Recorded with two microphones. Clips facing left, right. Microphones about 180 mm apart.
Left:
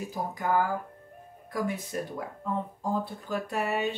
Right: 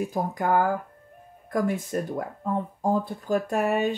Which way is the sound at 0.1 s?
50° right (ahead or behind).